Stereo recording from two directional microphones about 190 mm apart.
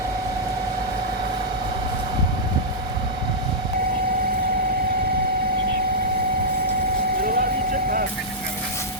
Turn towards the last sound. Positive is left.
turn(degrees=-50)  # may be behind; listen again after turning